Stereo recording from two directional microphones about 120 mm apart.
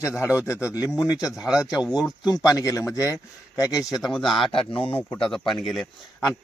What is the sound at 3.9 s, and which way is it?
Speech, centre (ahead or behind).